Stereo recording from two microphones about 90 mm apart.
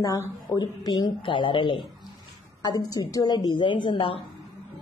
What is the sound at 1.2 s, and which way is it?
Speech, 70° left (ahead or behind).